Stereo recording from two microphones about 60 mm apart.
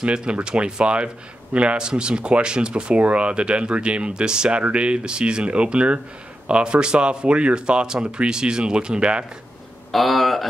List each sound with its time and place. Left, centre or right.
0.0 s speech: centre
9.8 s speech: centre